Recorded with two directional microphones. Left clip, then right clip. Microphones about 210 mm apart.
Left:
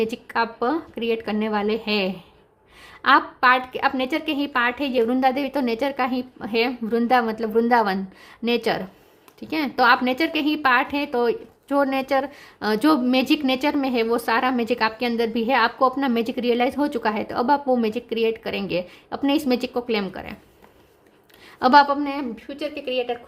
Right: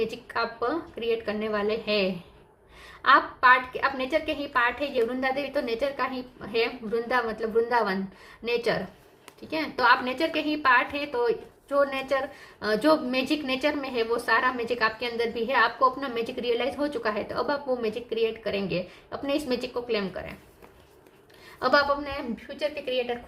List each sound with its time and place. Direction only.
0.0 s a woman's voice: 50° left (ahead or behind)
21.6 s a woman's voice: 50° left (ahead or behind)